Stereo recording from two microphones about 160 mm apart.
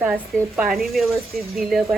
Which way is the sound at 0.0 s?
5° right (ahead or behind).